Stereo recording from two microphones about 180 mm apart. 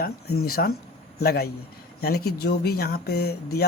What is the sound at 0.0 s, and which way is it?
Speech, 60° left (ahead or behind).